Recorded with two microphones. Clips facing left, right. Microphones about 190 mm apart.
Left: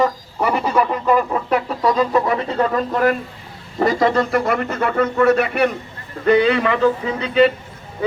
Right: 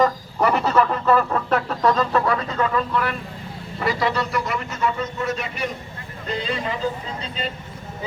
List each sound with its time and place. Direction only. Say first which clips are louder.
0.0 s speech: even; 10° left (ahead or behind); by 7.5 s 70° left (ahead or behind)